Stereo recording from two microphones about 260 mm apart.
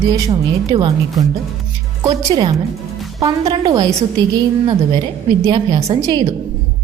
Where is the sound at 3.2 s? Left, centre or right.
Centre.